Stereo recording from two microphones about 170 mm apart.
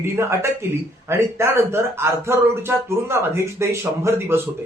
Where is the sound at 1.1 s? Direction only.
15° right (ahead or behind).